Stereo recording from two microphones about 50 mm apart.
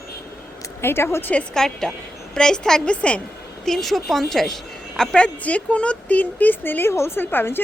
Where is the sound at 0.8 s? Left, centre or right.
Left.